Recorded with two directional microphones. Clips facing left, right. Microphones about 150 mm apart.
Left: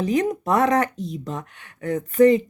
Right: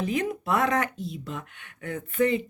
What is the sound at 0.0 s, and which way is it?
Speech, 40° left (ahead or behind).